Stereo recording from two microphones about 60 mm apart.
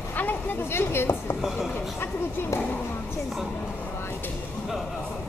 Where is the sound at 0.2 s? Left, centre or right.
Left.